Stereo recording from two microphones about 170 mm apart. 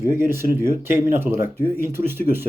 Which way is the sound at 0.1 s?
15° right (ahead or behind).